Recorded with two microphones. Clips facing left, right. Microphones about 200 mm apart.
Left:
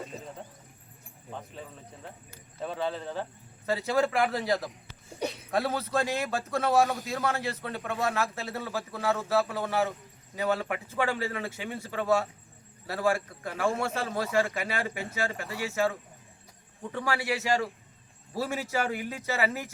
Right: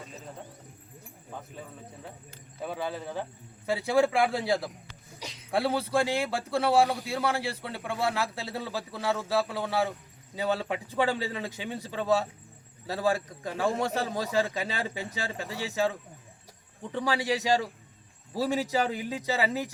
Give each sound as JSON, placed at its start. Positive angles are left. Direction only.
{"t": 2.6, "sound": "a man's voice", "side_deg": -10}
{"t": 5.2, "sound": "a sound", "side_deg": 60}
{"t": 5.5, "sound": "a man's voice", "side_deg": -10}